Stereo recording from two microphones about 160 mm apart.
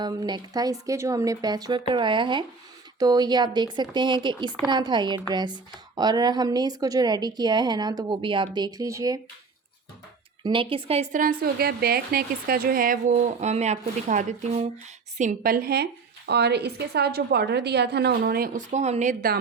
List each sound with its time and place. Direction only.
0.0 s speech: 25° right (ahead or behind)
10.4 s speech: 30° right (ahead or behind)
11.1 s a woman's voice: 60° right (ahead or behind)